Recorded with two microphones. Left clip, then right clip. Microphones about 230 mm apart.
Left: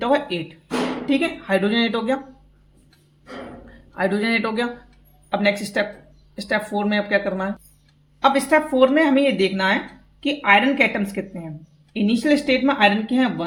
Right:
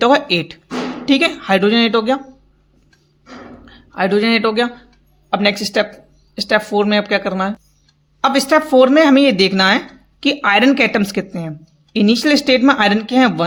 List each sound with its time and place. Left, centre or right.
0.0 s speech: right
3.7 s a man's voice: right